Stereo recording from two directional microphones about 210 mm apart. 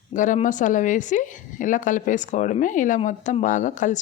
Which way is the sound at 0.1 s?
35° left (ahead or behind).